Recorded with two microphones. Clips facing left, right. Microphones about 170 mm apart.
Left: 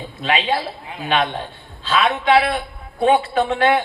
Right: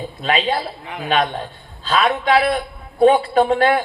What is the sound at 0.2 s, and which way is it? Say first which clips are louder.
A woman's voice: right 1 dB; 40° right (ahead or behind).